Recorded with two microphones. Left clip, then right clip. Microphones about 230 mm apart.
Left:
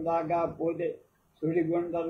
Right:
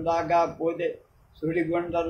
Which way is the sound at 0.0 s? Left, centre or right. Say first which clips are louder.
Right 5 dB; right.